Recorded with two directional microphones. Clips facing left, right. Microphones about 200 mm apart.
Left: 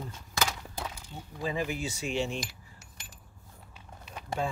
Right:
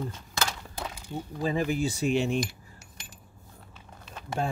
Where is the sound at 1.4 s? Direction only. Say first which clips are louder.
Right 5 dB; 40° right (ahead or behind).